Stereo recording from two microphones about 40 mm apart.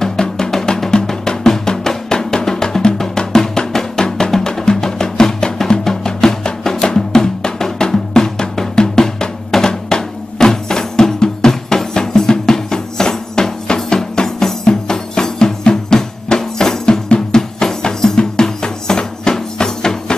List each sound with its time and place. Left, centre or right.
0.0 s drum: centre
17.1 s music: centre